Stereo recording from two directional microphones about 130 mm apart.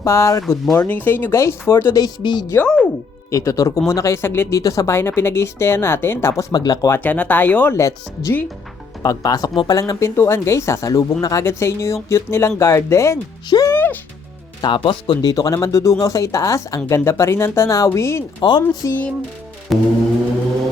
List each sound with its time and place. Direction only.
0.0 s speech: 20° left (ahead or behind)
2.6 s speech: 5° left (ahead or behind)
3.3 s speech: 25° left (ahead or behind)
7.0 s speech: 15° left (ahead or behind)
13.7 s music: 15° left (ahead or behind)
14.6 s speech: 35° left (ahead or behind); by 18.2 s 20° left (ahead or behind)
18.3 s speech: 35° left (ahead or behind)
19.7 s music: centre (ahead or behind)